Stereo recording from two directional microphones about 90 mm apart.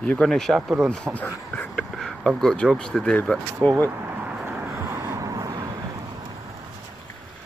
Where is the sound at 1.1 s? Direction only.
15° left (ahead or behind).